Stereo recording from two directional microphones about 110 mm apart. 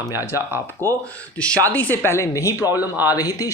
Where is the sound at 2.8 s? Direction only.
15° right (ahead or behind).